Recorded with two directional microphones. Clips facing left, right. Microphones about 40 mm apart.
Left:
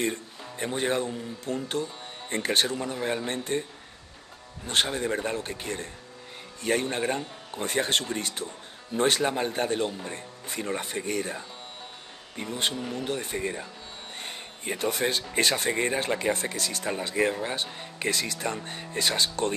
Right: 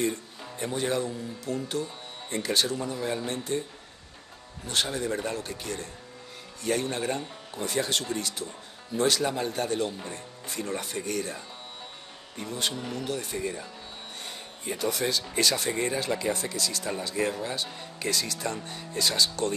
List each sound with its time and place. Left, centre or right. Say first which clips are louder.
0.0 s music: even; left
0.7 s speech: left 1 dB; left
4.6 s a man's voice: left 2 dB; left